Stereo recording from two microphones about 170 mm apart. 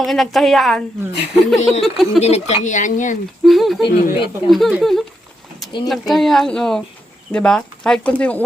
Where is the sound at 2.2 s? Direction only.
40° left (ahead or behind).